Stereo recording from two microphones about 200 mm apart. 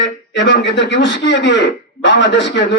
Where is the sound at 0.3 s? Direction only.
60° left (ahead or behind).